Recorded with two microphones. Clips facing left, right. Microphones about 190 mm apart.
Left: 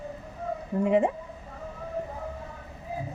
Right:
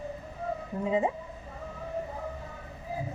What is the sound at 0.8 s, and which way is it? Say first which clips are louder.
Speech: left 4 dB; 75° left (ahead or behind).